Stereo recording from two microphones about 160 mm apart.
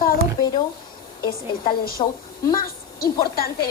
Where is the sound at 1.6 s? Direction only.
65° left (ahead or behind).